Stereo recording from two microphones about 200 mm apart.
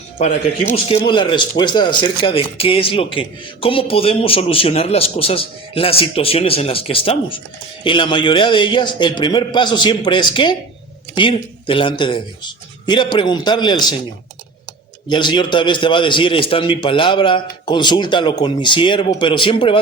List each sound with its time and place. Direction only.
0.9 s speech: 25° left (ahead or behind)
15.1 s speech: 25° left (ahead or behind)